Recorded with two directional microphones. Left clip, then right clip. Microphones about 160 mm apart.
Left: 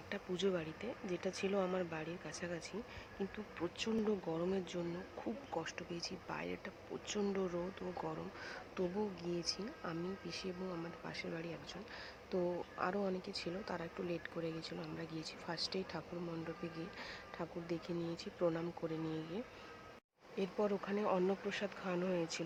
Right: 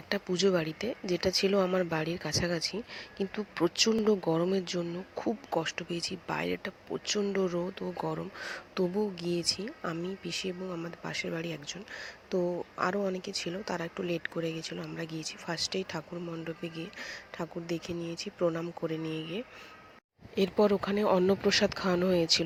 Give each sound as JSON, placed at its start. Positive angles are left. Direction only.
{"t": 0.1, "sound": "speech", "side_deg": -40}
{"t": 20.3, "sound": "speech", "side_deg": -40}